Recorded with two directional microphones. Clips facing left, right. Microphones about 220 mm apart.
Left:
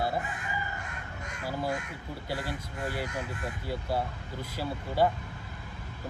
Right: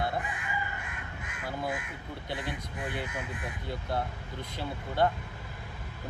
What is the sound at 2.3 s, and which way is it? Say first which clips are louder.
Speech: left 1 dB; 20° right (ahead or behind).